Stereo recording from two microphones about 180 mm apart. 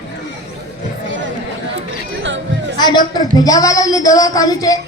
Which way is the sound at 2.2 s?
90° right.